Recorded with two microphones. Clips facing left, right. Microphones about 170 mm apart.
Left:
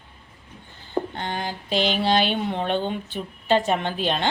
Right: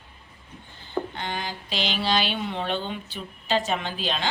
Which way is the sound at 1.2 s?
50° left (ahead or behind).